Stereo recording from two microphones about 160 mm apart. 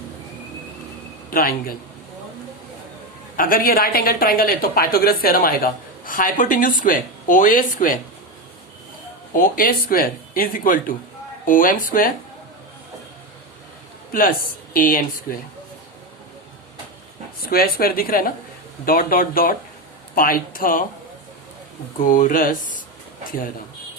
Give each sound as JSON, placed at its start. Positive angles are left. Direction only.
{"t": 1.3, "sound": "a woman's voice", "side_deg": 65}
{"t": 3.3, "sound": "a woman's voice", "side_deg": 60}
{"t": 9.3, "sound": "a woman's voice", "side_deg": 60}
{"t": 14.1, "sound": "a woman's voice", "side_deg": 60}
{"t": 17.4, "sound": "a woman's voice", "side_deg": 70}
{"t": 22.0, "sound": "a woman's voice", "side_deg": 60}